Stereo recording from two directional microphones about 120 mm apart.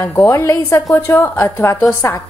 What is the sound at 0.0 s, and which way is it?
A woman's voice, 20° left (ahead or behind).